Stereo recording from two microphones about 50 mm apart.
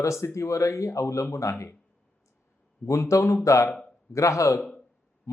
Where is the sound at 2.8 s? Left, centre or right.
Left.